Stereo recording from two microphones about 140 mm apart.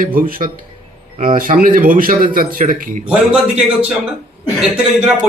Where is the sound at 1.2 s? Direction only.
75° right (ahead or behind).